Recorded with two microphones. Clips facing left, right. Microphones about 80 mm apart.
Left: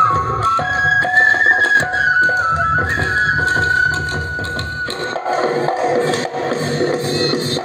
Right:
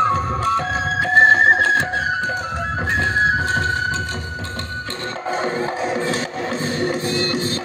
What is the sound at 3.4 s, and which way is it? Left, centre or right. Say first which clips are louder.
Music: left 6 dB; left.